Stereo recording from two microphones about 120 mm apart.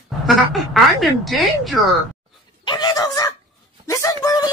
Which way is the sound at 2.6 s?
35° left (ahead or behind).